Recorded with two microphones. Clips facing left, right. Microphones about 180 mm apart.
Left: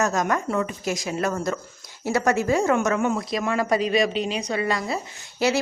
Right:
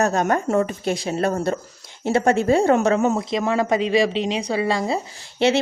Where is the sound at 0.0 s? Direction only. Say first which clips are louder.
Right 3 dB; 30° right (ahead or behind).